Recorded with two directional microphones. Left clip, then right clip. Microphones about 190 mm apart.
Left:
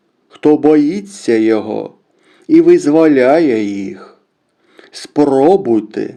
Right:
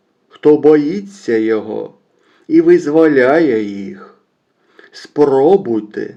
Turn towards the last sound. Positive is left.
turn(degrees=35)  # may be behind; listen again after turning